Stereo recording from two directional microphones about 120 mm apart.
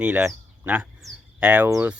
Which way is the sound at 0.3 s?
15° right (ahead or behind).